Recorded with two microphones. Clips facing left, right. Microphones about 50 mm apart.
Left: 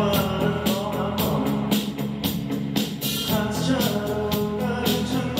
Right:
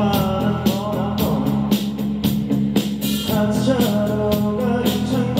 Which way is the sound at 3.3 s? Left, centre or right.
Centre.